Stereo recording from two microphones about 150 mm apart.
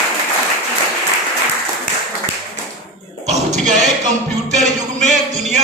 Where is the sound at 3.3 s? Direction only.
50° right (ahead or behind).